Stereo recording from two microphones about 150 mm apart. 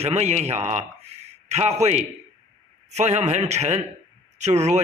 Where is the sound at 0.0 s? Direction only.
45° right (ahead or behind).